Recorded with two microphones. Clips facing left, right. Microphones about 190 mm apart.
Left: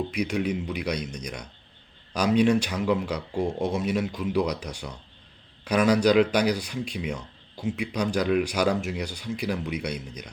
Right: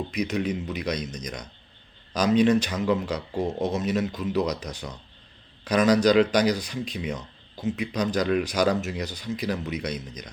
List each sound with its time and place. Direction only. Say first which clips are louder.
0.1 s speech: even; 10° left (ahead or behind)